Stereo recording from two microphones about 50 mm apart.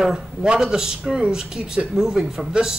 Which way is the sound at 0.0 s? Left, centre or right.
Centre.